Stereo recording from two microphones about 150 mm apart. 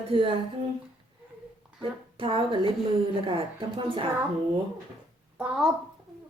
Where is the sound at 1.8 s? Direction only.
35° right (ahead or behind).